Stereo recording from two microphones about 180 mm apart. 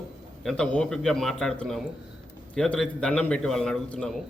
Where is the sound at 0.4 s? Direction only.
5° left (ahead or behind).